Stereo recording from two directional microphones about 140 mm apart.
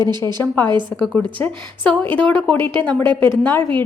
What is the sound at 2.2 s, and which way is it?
Speech, 10° left (ahead or behind).